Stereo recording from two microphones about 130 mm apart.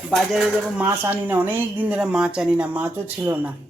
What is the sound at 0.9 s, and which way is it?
Speech, 15° right (ahead or behind).